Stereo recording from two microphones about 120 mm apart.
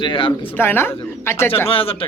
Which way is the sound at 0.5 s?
20° left (ahead or behind).